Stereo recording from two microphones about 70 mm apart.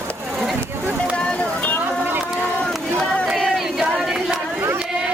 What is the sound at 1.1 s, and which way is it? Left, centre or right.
Vehicle, centre.